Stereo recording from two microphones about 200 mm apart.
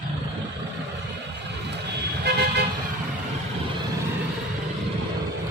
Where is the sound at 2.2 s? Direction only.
55° right (ahead or behind).